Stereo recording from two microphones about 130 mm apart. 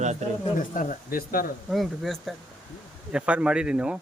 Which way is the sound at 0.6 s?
90° left.